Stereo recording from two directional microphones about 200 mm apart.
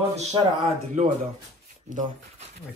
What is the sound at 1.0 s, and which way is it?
Speech, 35° right (ahead or behind).